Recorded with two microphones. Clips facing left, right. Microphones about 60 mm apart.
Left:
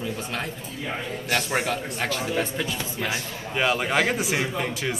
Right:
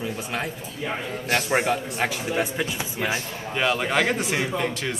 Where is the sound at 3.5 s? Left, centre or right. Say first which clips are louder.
Even; centre.